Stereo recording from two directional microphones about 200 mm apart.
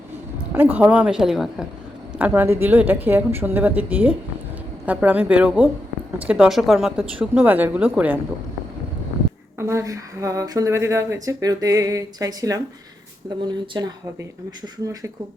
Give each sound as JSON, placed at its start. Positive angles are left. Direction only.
{"t": 0.5, "sound": "a woman's voice", "side_deg": -10}
{"t": 9.6, "sound": "speech", "side_deg": -15}